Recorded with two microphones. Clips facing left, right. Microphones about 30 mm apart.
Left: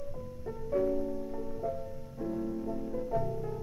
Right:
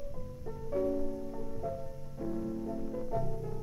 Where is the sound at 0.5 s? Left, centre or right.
Centre.